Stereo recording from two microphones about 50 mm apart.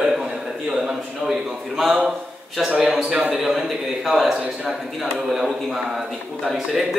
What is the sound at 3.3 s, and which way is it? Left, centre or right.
A man's voice, centre.